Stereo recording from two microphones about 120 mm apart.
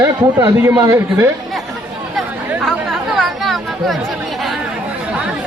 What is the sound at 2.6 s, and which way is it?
Chatter, centre (ahead or behind).